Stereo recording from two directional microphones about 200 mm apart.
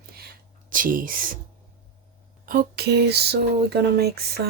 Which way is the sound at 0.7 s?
45° right (ahead or behind).